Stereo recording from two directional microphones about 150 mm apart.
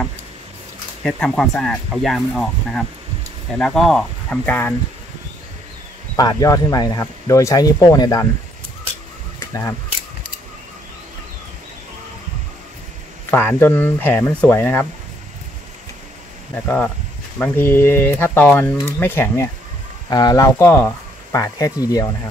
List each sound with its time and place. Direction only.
1.0 s speech: 5° left (ahead or behind)
6.1 s speech: 25° left (ahead or behind)
9.5 s speech: 15° left (ahead or behind)
13.3 s speech: 10° left (ahead or behind)
16.6 s speech: 5° left (ahead or behind)
20.1 s speech: 25° left (ahead or behind)